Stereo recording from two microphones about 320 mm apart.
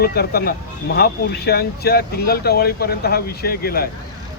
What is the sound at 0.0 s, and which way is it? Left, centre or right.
Speech, left.